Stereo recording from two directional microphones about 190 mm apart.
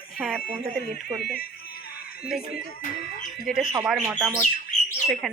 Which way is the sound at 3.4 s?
Centre (ahead or behind).